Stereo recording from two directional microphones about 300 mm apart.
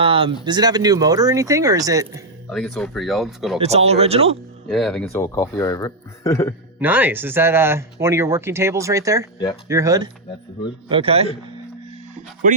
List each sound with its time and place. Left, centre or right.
0.0 s a sound: centre
0.4 s speech: centre
2.5 s speech: centre
3.6 s speech: right
4.7 s speech: centre
6.7 s speech: centre
12.4 s speech: right